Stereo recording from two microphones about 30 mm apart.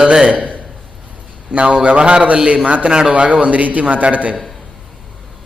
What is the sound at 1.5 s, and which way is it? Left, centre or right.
A man's voice, right.